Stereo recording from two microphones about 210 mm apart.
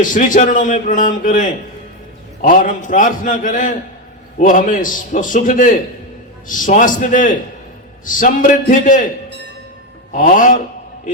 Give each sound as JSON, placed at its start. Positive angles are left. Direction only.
{"t": 0.0, "sound": "a man's voice", "side_deg": 40}
{"t": 10.1, "sound": "a man's voice", "side_deg": 40}